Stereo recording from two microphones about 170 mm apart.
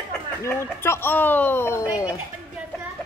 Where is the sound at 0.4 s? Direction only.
15° left (ahead or behind).